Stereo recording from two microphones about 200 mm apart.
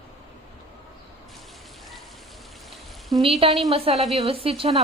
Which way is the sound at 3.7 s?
30° right (ahead or behind).